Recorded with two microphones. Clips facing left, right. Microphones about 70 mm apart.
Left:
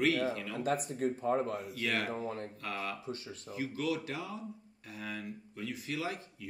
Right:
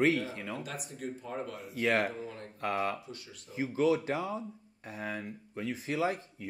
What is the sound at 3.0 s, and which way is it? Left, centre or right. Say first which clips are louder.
Speech: left 5 dB; left.